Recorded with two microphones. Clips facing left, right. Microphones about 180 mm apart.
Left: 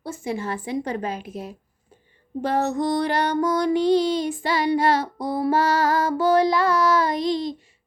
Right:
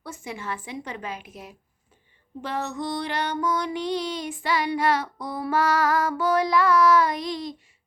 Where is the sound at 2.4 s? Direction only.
40° left (ahead or behind).